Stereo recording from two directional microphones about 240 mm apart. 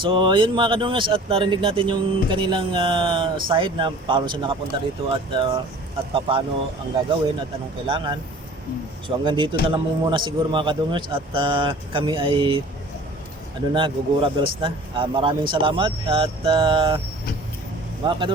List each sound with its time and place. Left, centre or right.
0.0 s speech: right
13.7 s speech: centre
18.0 s speech: right